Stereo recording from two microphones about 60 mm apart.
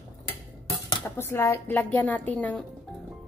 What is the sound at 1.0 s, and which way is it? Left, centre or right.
Speech, left.